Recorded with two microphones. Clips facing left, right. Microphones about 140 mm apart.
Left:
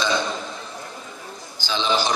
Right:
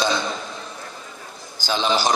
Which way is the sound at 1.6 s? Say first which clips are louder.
Right 2 dB; 45° right (ahead or behind).